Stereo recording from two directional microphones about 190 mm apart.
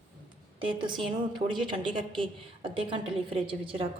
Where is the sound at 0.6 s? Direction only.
25° right (ahead or behind).